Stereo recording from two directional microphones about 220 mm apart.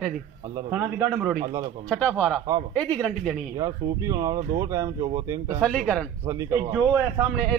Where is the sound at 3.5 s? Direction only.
15° right (ahead or behind).